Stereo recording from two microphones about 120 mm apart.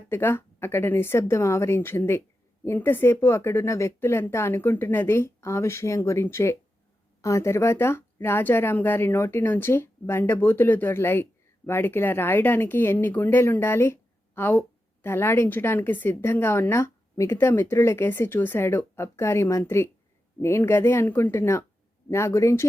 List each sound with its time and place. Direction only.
0.1 s speech: 20° left (ahead or behind)